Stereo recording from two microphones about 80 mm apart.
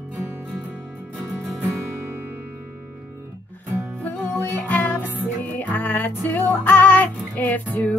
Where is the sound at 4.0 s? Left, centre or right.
Centre.